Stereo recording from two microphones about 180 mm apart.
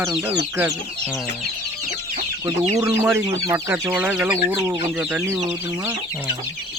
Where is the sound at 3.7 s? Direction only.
10° right (ahead or behind).